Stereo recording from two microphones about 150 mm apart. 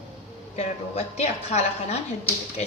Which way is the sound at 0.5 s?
45° left (ahead or behind).